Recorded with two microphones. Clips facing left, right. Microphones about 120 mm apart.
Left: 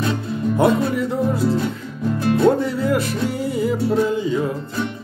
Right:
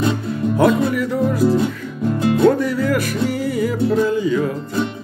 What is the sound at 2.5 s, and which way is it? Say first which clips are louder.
Music: right 1 dB; 25° left (ahead or behind).